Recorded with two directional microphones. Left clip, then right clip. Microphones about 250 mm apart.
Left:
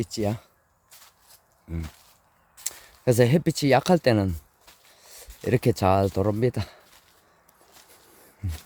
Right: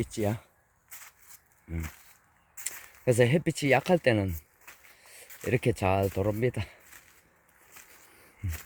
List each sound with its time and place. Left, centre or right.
0.0 s speech: centre
1.7 s speech: centre
2.6 s speech: left